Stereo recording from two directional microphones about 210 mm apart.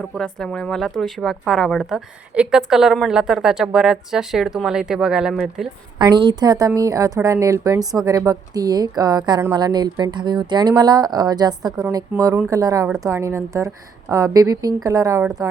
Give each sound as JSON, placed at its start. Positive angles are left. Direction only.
{"t": 0.2, "sound": "a woman's voice", "side_deg": 5}
{"t": 6.0, "sound": "speech", "side_deg": -20}